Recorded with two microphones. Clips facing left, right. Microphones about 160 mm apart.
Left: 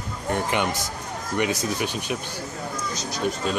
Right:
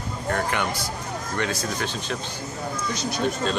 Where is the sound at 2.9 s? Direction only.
65° right (ahead or behind).